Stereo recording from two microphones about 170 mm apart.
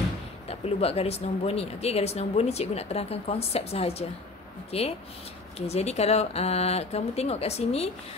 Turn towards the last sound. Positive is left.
turn(degrees=35)  # may be behind; listen again after turning